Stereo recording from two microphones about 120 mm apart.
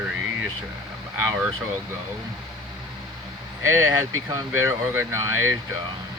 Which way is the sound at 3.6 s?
20° right (ahead or behind).